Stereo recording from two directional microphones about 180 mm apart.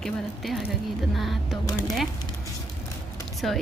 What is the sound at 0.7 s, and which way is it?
Speech, centre (ahead or behind).